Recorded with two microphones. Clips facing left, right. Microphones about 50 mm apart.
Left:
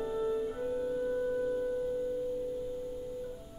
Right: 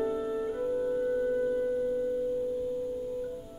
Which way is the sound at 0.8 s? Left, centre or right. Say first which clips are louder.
Right 3 dB; centre.